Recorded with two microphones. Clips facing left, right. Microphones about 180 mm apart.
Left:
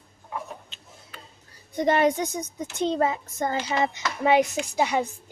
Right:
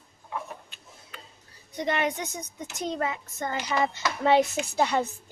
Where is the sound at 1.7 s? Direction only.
45° left (ahead or behind).